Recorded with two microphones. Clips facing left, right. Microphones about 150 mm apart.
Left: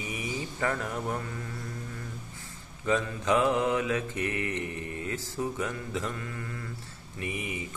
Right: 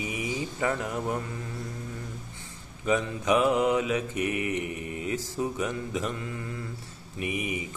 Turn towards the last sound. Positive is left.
turn(degrees=-15)  # may be behind; listen again after turning